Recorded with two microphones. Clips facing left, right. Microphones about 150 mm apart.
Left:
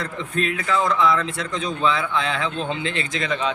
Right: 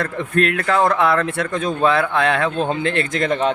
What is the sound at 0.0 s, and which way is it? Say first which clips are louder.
A man's voice: right 6 dB; 60° right (ahead or behind).